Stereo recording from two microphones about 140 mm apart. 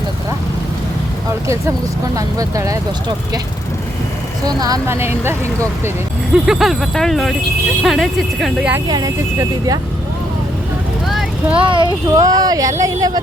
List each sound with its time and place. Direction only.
2.1 s speech: 25° right (ahead or behind)
4.4 s speech: 25° right (ahead or behind)
6.4 s speech: centre (ahead or behind)
8.9 s speech: 25° right (ahead or behind)
11.1 s vehicle: 5° right (ahead or behind)
11.6 s speech: 35° right (ahead or behind)